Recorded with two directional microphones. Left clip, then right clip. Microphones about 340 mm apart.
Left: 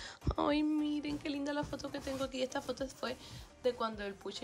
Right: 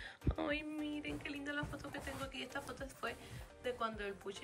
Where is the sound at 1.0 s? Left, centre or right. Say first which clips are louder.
Left 5 dB; centre.